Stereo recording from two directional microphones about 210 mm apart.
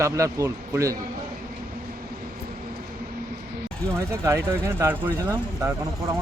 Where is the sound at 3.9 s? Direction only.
10° right (ahead or behind).